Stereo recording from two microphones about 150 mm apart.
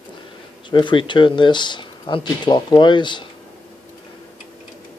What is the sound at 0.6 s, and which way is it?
Speech, 30° left (ahead or behind).